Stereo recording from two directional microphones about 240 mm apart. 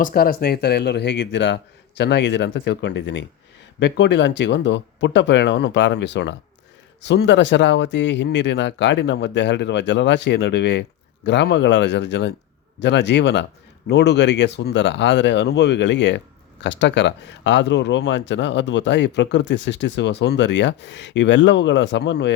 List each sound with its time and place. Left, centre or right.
0.0 s speech: left